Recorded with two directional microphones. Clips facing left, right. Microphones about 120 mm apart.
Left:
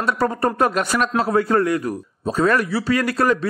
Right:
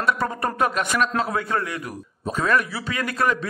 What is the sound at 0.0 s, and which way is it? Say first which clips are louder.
A man's voice: left 4 dB; 35° left (ahead or behind).